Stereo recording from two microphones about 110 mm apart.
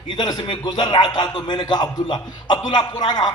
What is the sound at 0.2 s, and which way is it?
A man's voice, 45° left (ahead or behind).